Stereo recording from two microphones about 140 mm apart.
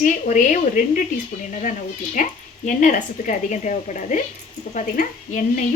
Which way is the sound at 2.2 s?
65° left (ahead or behind).